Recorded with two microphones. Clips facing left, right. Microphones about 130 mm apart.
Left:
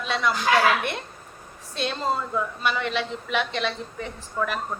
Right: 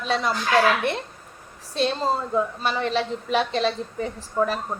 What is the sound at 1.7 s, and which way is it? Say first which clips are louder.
A woman's voice: right 3 dB; 30° right (ahead or behind).